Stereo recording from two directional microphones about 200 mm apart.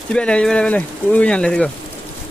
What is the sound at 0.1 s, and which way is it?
Speech, 5° left (ahead or behind).